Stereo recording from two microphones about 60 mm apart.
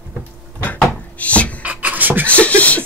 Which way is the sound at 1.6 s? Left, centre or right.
Right.